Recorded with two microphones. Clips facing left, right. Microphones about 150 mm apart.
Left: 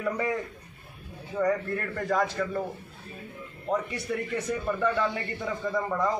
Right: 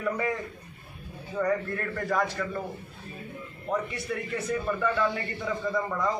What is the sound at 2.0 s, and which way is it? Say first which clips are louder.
Speech: left 1 dB; 25° left (ahead or behind).